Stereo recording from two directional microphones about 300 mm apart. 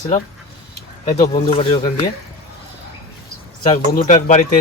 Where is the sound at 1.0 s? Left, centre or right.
Centre.